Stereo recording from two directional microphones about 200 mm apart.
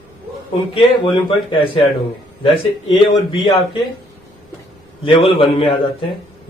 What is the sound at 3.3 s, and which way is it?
Speech, 30° left (ahead or behind).